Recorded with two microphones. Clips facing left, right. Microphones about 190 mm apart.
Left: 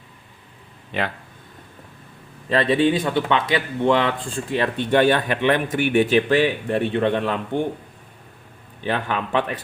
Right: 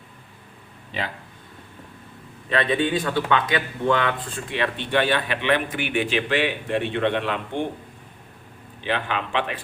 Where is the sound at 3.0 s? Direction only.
25° left (ahead or behind); by 7.3 s 40° left (ahead or behind).